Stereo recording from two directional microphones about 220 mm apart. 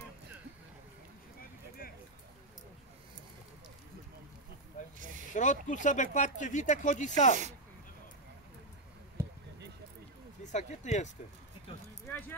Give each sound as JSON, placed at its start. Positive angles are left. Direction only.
{"t": 4.8, "sound": "snake", "side_deg": 35}
{"t": 5.3, "sound": "speech", "side_deg": 35}
{"t": 9.2, "sound": "basketball bounce", "side_deg": -10}
{"t": 10.4, "sound": "speech", "side_deg": 35}